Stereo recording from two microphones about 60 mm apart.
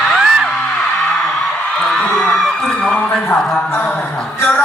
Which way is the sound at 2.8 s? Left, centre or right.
Left.